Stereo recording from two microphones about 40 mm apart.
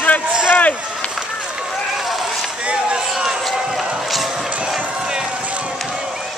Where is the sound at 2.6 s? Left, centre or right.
Right.